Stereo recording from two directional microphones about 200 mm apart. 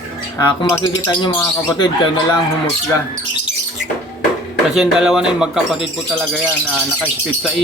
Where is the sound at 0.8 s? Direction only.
20° left (ahead or behind).